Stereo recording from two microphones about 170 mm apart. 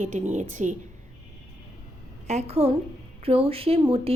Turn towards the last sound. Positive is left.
turn(degrees=-35)  # may be behind; listen again after turning